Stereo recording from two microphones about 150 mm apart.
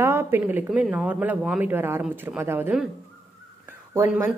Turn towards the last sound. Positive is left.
turn(degrees=-15)  # may be behind; listen again after turning